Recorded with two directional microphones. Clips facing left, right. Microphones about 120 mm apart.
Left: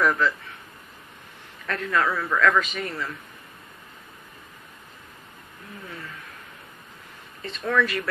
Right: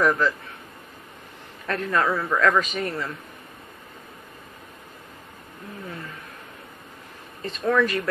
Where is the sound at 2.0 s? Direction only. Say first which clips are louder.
Right 1 dB; 15° right (ahead or behind).